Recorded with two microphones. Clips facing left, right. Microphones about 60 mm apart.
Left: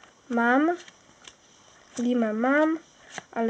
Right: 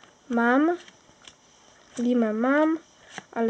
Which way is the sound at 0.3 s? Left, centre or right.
Centre.